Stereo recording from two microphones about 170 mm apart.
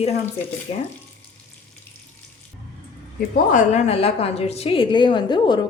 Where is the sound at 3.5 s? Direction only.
45° left (ahead or behind).